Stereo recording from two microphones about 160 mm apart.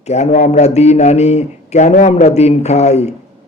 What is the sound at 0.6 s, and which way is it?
A man's voice, 45° left (ahead or behind).